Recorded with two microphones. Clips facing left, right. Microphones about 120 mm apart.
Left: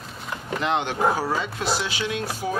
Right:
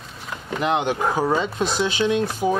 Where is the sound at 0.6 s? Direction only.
15° right (ahead or behind).